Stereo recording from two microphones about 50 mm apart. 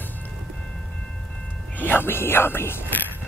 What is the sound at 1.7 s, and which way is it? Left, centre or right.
Speech, left.